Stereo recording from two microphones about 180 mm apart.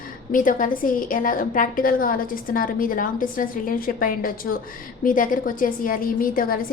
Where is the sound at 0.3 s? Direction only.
50° left (ahead or behind).